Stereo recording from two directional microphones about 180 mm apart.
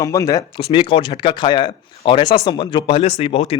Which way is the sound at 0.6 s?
30° left (ahead or behind).